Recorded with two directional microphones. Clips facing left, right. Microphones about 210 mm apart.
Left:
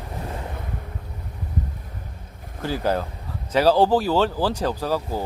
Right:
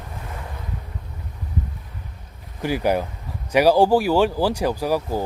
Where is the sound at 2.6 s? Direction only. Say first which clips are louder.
Right 3 dB; 15° right (ahead or behind).